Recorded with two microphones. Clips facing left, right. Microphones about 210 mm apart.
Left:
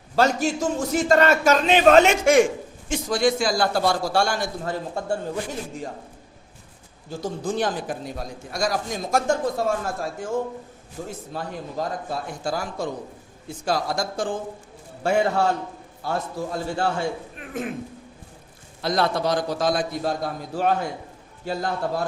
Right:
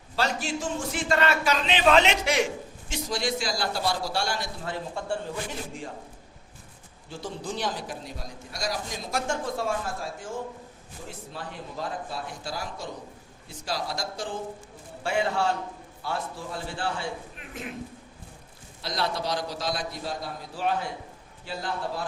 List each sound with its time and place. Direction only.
0.2 s a man's voice: 45° left (ahead or behind)
7.1 s a man's voice: 45° left (ahead or behind)
11.1 s a man's voice: 45° left (ahead or behind)
18.8 s a man's voice: 50° left (ahead or behind)